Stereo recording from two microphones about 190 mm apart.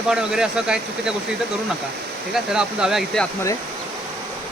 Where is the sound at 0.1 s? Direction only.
5° right (ahead or behind).